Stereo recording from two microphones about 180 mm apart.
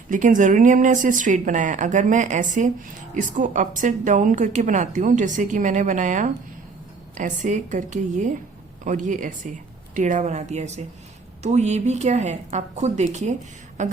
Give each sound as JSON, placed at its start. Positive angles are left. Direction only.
{"t": 0.1, "sound": "a woman's voice", "side_deg": -45}